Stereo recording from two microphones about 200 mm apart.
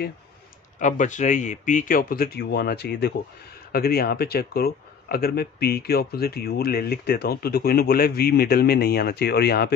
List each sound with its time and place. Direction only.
0.7 s speech: 40° left (ahead or behind)